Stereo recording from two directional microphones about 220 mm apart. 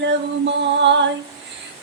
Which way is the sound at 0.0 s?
55° right (ahead or behind).